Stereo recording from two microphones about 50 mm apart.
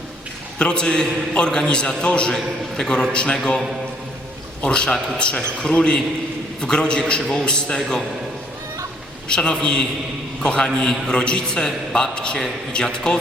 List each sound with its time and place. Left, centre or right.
0.6 s a man's voice: centre
4.6 s a man's voice: centre
9.3 s a man's voice: centre